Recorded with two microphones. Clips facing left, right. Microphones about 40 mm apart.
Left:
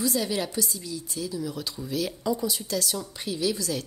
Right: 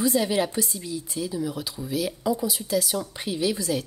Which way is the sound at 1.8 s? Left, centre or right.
Centre.